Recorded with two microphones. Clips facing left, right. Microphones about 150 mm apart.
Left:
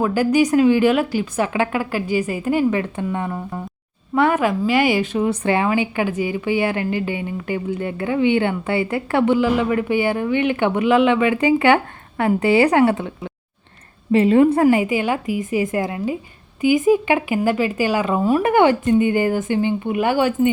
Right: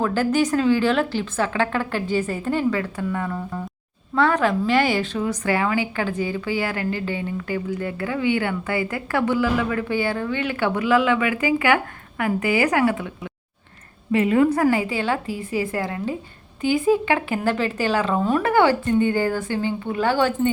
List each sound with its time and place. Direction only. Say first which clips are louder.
0.0 s speech: left 3 dB; 10° left (ahead or behind)
2.6 s a woman's voice: left 2 dB; 20° left (ahead or behind)
14.1 s a woman's voice: left 4 dB; 25° left (ahead or behind)